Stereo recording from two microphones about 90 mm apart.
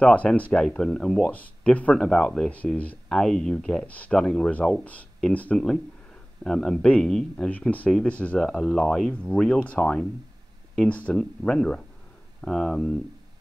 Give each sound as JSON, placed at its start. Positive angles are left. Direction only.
{"t": 0.0, "sound": "speech", "side_deg": 15}
{"t": 3.1, "sound": "speech", "side_deg": 5}